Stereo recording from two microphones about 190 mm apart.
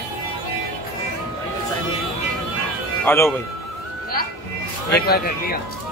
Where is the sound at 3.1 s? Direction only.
10° left (ahead or behind).